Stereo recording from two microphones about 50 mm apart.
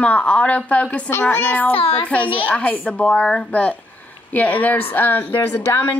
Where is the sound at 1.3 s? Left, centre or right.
Left.